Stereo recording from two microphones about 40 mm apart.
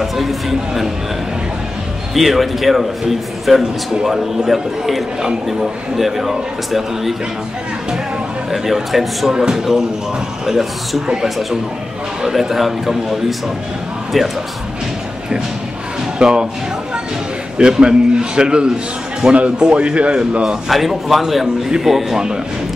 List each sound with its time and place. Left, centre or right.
0.0 s a man's voice: centre
2.1 s a man's voice: centre
3.9 s a man's voice: centre
8.5 s a man's voice: centre
9.3 s a man's voice: centre
10.4 s a man's voice: centre
12.2 s a man's voice: centre
14.1 s a man's voice: centre
16.2 s a man's voice: centre
17.6 s a man's voice: centre
20.4 s a man's voice: centre
21.6 s a man's voice: centre